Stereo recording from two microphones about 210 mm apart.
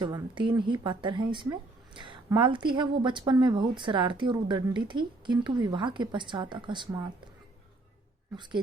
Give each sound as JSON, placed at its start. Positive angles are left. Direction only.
{"t": 0.0, "sound": "a woman's voice", "side_deg": -20}